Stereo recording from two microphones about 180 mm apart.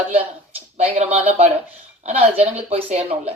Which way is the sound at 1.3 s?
35° right (ahead or behind).